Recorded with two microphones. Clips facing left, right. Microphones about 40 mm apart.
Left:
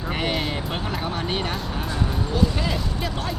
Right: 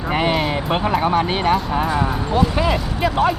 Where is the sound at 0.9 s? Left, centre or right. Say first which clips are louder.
Right 9 dB; right.